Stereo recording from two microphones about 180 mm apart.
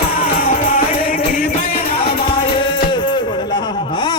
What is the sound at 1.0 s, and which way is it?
Music, 50° left (ahead or behind).